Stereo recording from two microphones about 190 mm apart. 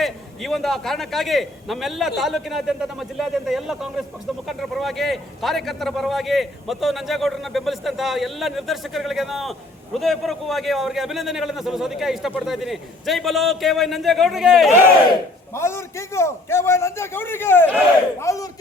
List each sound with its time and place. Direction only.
0.0 s a man's voice: centre (ahead or behind)
15.5 s a man's voice: 15° left (ahead or behind)